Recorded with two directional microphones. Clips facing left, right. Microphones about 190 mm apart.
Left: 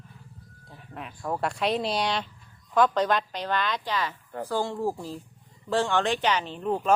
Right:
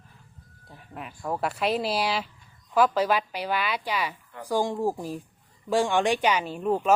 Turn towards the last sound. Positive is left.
turn(degrees=-10)  # may be behind; listen again after turning